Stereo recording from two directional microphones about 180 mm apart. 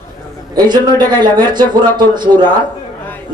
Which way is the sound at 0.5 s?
25° right (ahead or behind).